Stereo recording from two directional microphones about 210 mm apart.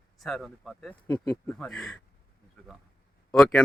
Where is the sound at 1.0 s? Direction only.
15° left (ahead or behind).